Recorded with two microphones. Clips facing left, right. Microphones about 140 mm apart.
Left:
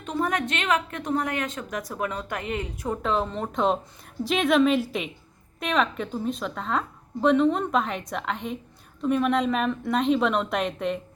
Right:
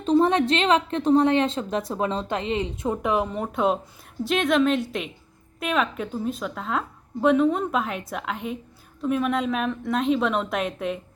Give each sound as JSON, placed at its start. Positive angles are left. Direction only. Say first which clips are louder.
{"t": 0.0, "sound": "a woman's voice", "louder": "right 8 dB", "side_deg": -30}